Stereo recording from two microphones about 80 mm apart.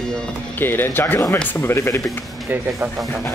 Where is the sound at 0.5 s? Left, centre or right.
Left.